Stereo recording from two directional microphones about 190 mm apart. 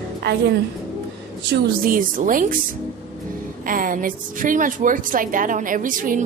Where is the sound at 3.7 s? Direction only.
45° right (ahead or behind).